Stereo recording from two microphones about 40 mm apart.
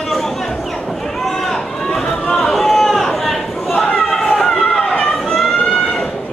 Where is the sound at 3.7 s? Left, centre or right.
Left.